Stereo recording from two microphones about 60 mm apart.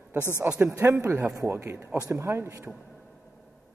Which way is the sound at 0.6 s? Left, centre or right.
Right.